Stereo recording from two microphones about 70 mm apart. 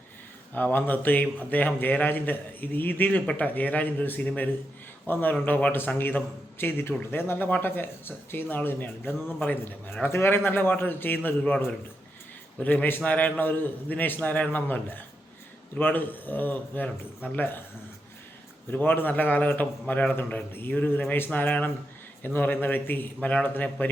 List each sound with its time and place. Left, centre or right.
0.5 s speech: left
12.5 s speech: left
18.7 s speech: left